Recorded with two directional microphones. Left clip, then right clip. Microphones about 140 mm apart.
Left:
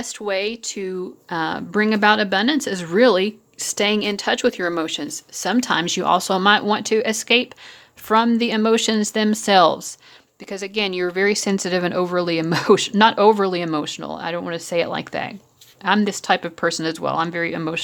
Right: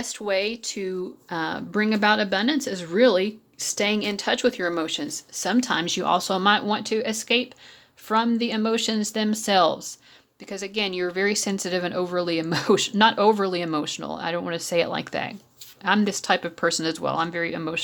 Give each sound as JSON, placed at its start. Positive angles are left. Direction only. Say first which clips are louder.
{"t": 0.0, "sound": "speech", "louder": "left 2 dB", "side_deg": 20}